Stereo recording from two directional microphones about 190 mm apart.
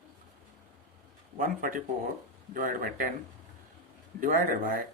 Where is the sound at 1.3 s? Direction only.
45° right (ahead or behind).